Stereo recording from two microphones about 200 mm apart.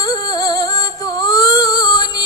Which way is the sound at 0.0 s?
20° left (ahead or behind).